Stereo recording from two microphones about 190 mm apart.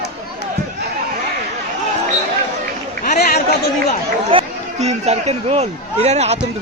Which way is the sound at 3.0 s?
50° left (ahead or behind).